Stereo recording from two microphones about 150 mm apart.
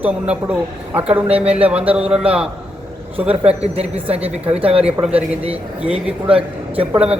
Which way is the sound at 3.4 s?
45° right (ahead or behind).